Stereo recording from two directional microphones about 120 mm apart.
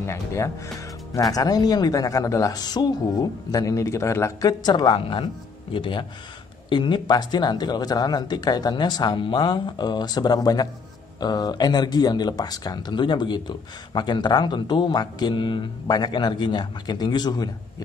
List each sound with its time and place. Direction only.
0.0 s speech: 20° left (ahead or behind)